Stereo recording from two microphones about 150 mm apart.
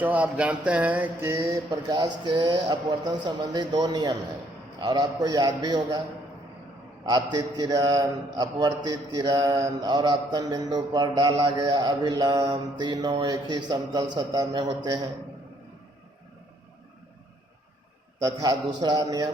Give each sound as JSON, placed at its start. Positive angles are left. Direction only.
{"t": 0.0, "sound": "a sound", "side_deg": -10}
{"t": 3.8, "sound": "a man's voice", "side_deg": -25}
{"t": 7.0, "sound": "a man's voice", "side_deg": -30}
{"t": 18.2, "sound": "a man's voice", "side_deg": -25}